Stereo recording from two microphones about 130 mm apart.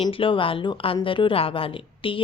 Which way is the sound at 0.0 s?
40° left (ahead or behind).